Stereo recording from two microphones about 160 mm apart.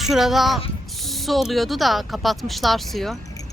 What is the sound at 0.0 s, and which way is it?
Speech, centre (ahead or behind).